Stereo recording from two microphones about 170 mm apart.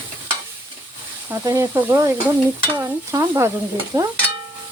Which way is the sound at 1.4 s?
15° right (ahead or behind).